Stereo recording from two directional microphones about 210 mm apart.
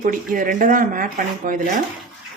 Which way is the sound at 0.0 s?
40° right (ahead or behind).